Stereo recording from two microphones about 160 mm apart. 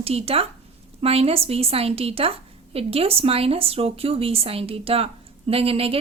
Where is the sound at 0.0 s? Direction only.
40° right (ahead or behind).